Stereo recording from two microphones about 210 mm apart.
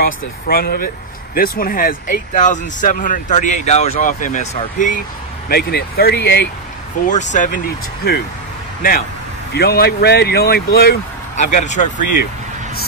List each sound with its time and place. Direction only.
0.0 s speech: 45° left (ahead or behind)
5.5 s speech: 50° left (ahead or behind)
7.1 s speech: 35° left (ahead or behind)
9.5 s speech: 50° left (ahead or behind)
11.3 s speech: 35° left (ahead or behind)